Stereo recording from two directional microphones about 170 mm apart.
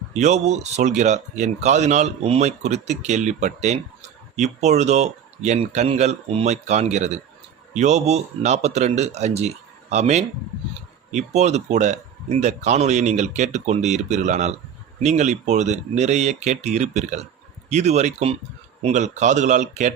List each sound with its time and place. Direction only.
0.1 s speech: 45° right (ahead or behind)